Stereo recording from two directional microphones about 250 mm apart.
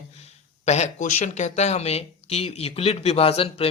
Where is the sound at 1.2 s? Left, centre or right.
Left.